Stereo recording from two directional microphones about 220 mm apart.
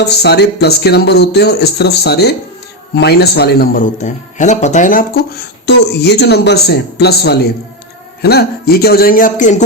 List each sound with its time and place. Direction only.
0.2 s speech: 50° left (ahead or behind)